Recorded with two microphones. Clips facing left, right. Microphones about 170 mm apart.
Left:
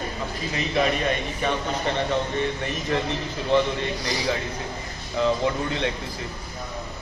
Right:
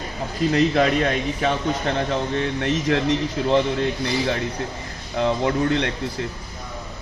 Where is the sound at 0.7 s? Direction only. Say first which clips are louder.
Right 4 dB; 75° right (ahead or behind).